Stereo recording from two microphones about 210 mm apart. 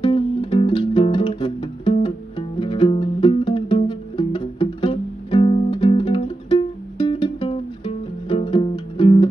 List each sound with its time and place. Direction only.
0.0 s music: 25° left (ahead or behind)